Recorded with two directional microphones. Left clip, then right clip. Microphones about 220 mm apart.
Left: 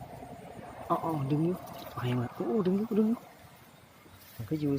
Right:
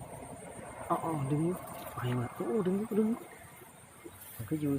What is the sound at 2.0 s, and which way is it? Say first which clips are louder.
Speech: left 3 dB; 15° left (ahead or behind).